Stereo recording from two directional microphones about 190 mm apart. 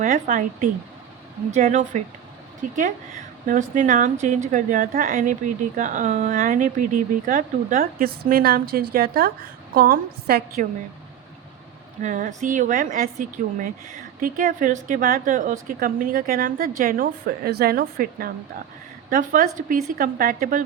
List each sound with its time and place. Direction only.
0.0 s speech: 45° right (ahead or behind)
3.4 s speech: 45° right (ahead or behind)
12.0 s speech: 40° right (ahead or behind)